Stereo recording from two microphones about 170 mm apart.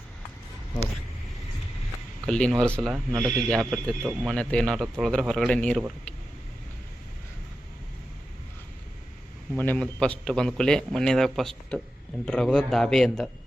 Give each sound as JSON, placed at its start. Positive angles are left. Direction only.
{"t": 2.2, "sound": "a man's voice", "side_deg": 5}
{"t": 9.6, "sound": "a man's voice", "side_deg": 10}